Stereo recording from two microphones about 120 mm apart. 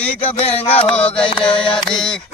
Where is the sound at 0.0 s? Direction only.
10° left (ahead or behind).